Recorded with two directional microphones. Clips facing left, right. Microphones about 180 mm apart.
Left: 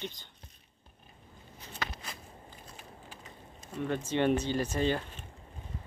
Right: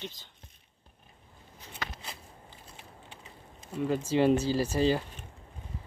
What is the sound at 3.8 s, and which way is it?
Speech, 5° right (ahead or behind).